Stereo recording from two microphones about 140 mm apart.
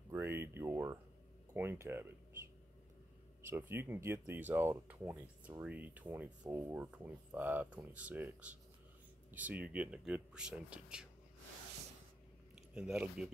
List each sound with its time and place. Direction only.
0.1 s a sound: 15° right (ahead or behind)
1.5 s speech: 15° right (ahead or behind)
3.4 s speech: 15° right (ahead or behind)
12.7 s speech: 5° right (ahead or behind)